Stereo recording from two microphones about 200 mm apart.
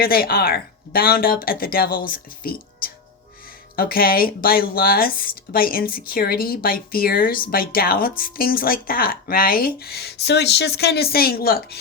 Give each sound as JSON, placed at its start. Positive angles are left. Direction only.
{"t": 0.0, "sound": "speech", "side_deg": 50}